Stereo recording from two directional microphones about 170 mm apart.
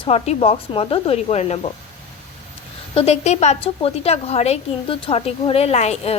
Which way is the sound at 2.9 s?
40° left (ahead or behind).